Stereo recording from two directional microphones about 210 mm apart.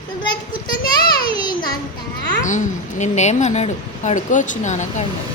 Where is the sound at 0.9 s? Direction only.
20° left (ahead or behind).